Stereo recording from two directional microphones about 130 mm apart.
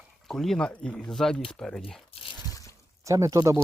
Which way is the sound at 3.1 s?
25° right (ahead or behind).